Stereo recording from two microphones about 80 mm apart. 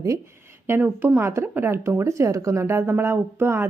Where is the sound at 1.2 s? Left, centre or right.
Right.